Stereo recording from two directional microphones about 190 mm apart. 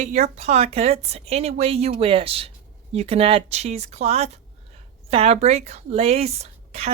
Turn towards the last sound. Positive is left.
turn(degrees=-35)  # may be behind; listen again after turning